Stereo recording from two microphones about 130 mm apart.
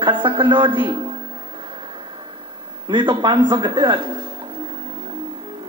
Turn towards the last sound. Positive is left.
turn(degrees=-35)  # may be behind; listen again after turning